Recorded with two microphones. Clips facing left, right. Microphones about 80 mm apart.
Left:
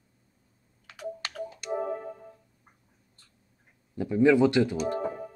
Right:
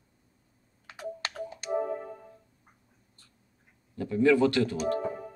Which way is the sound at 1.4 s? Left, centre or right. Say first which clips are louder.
Right 1 dB; centre.